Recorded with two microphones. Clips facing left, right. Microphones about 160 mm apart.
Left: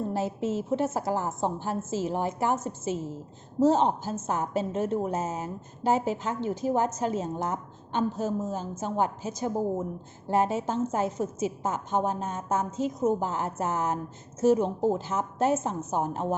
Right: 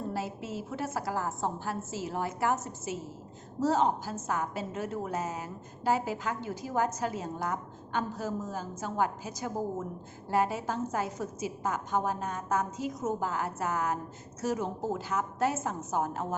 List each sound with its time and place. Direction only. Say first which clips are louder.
0.1 s a woman's voice: left 7 dB; 25° left (ahead or behind)
3.6 s a woman's voice: left 5 dB; 20° left (ahead or behind)